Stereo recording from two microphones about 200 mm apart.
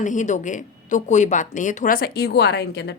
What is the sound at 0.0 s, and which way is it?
A woman's voice, 40° left (ahead or behind).